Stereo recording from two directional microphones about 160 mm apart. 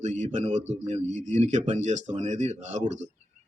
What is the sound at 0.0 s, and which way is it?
A man's voice, 45° right (ahead or behind).